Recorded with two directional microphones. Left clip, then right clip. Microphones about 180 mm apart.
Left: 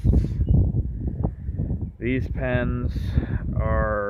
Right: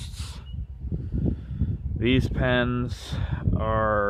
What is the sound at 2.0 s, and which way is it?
Speech, 25° right (ahead or behind).